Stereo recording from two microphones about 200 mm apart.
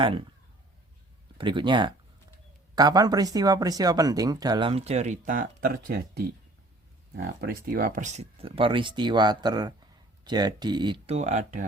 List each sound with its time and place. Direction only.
1.4 s speech: 25° right (ahead or behind); by 6.2 s 50° right (ahead or behind)
7.4 s speech: 45° right (ahead or behind)